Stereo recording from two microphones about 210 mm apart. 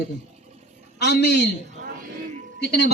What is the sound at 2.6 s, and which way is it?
Speech, 50° left (ahead or behind).